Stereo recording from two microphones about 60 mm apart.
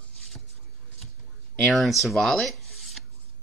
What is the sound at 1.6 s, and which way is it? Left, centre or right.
Speech, centre.